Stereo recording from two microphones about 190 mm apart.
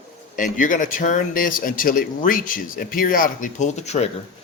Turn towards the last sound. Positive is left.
turn(degrees=35)  # may be behind; listen again after turning